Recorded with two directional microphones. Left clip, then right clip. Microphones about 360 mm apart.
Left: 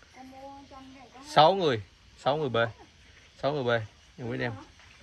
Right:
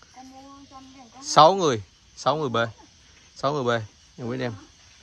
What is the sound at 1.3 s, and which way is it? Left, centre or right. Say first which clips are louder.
Speech: right 5 dB; centre.